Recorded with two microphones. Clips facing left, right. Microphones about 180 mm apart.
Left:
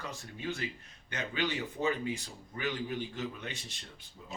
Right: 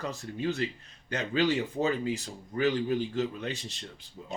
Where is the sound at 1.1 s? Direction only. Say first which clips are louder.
Right 8 dB; 35° right (ahead or behind).